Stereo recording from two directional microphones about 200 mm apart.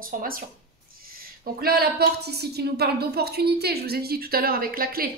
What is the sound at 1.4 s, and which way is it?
A woman's voice, 50° right (ahead or behind).